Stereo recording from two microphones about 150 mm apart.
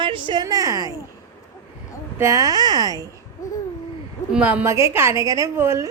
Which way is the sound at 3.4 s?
20° left (ahead or behind).